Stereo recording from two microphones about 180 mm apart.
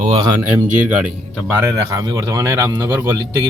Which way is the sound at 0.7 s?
5° right (ahead or behind).